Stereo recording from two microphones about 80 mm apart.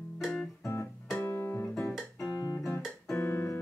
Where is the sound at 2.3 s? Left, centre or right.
Left.